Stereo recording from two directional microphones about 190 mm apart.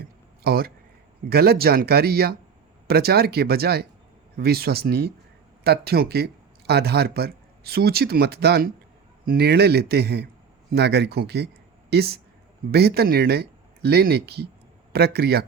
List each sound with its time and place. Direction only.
0.4 s speech: 50° right (ahead or behind)